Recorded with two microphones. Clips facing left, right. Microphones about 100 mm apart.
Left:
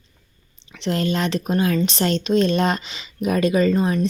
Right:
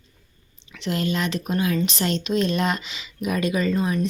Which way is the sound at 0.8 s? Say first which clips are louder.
Left 3 dB; 35° left (ahead or behind).